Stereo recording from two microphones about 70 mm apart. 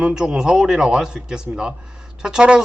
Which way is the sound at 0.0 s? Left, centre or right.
Centre.